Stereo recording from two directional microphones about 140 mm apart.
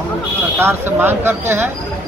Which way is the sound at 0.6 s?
15° right (ahead or behind).